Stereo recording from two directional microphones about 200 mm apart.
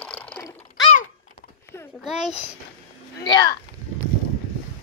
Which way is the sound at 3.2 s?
20° left (ahead or behind).